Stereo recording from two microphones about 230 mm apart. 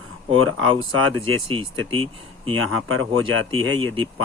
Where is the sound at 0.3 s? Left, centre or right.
Right.